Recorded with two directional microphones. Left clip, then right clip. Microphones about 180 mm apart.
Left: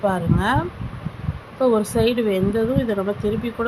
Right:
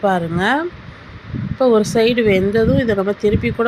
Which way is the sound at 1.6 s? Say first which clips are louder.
Right 5 dB; 15° right (ahead or behind).